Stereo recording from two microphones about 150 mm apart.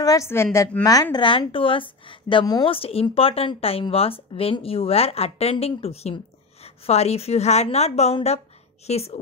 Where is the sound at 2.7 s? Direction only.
40° left (ahead or behind).